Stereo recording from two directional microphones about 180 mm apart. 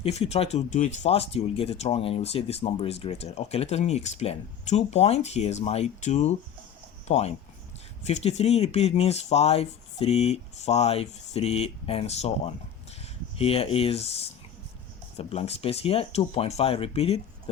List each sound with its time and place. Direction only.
0.0 s speech: 35° left (ahead or behind)